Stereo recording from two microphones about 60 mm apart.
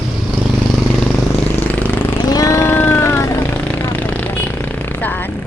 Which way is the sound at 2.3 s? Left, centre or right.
Left.